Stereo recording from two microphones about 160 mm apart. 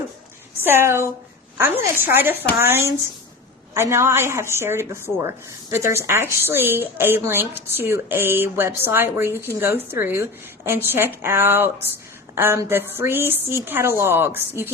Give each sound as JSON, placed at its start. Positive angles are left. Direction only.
{"t": 0.6, "sound": "a woman's voice", "side_deg": -15}